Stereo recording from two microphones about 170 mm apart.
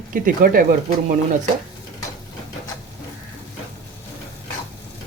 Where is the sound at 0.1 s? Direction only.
55° right (ahead or behind).